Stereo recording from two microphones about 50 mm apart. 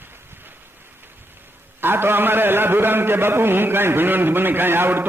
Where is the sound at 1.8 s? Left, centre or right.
Right.